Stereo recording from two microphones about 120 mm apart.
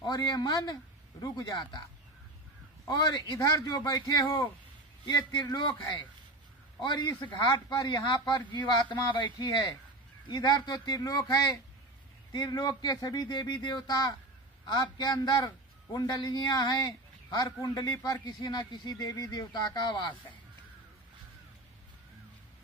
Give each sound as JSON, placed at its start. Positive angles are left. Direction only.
{"t": 0.0, "sound": "a man's voice", "side_deg": 35}
{"t": 2.9, "sound": "a man's voice", "side_deg": 35}